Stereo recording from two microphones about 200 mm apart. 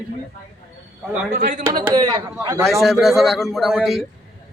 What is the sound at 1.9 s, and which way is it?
Speech, 20° right (ahead or behind).